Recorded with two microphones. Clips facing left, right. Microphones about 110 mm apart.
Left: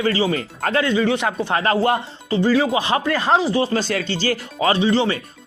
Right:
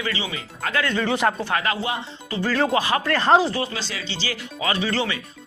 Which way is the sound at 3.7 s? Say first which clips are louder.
Left 10 dB; 50° left (ahead or behind).